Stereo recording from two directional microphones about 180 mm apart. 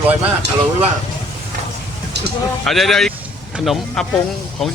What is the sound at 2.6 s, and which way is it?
Speech, centre (ahead or behind).